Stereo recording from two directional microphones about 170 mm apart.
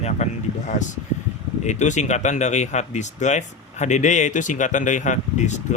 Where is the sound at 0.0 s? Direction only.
45° left (ahead or behind).